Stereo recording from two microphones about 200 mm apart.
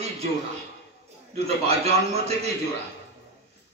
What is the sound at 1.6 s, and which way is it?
Speech, 30° right (ahead or behind).